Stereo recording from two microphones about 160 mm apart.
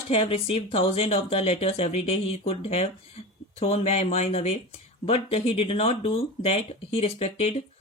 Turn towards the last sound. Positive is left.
turn(degrees=40)  # may be behind; listen again after turning